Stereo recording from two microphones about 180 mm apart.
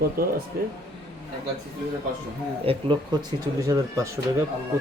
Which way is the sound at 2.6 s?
30° right (ahead or behind).